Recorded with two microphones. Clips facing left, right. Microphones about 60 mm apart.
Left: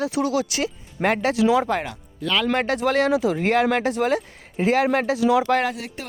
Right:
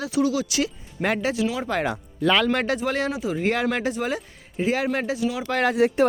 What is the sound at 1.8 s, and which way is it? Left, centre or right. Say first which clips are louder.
Speech: right 7 dB; centre.